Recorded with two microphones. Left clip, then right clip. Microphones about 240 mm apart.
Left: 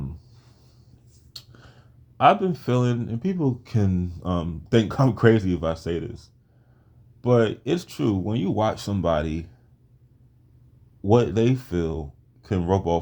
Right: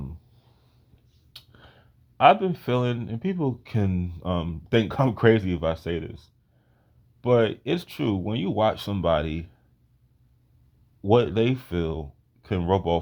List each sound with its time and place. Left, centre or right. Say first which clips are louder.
1.3 s speech: left 4 dB; right
11.0 s speech: left 1 dB; right